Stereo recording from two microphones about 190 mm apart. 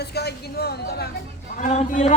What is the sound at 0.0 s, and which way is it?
A woman's voice, 60° left (ahead or behind).